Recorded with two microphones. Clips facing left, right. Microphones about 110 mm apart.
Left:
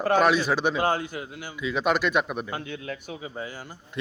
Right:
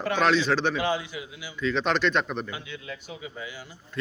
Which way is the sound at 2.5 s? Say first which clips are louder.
Left 5 dB; 50° left (ahead or behind).